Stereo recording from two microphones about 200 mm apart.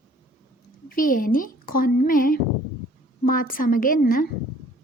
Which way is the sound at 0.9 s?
45° left (ahead or behind).